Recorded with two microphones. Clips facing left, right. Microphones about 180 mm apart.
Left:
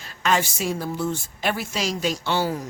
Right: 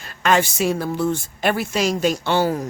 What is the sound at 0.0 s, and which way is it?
Speech, 60° right (ahead or behind).